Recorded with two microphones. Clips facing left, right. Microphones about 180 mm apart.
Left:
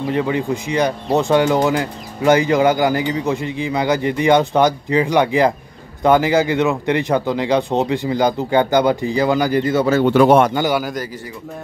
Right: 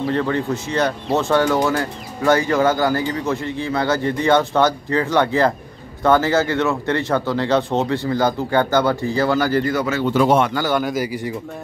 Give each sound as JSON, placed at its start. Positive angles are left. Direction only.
{"t": 0.0, "sound": "speech", "side_deg": 15}
{"t": 10.0, "sound": "a man's voice", "side_deg": 60}
{"t": 10.5, "sound": "a man's voice", "side_deg": 20}
{"t": 10.8, "sound": "a man's voice", "side_deg": 0}